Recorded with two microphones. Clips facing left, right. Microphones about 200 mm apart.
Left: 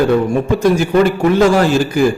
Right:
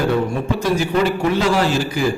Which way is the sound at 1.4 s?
50° left (ahead or behind).